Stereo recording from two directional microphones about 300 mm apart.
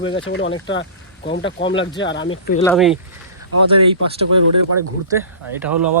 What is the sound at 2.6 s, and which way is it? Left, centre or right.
Speech, centre.